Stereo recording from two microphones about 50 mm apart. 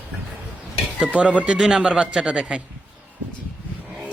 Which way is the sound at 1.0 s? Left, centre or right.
Centre.